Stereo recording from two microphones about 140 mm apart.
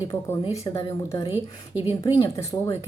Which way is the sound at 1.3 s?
15° right (ahead or behind).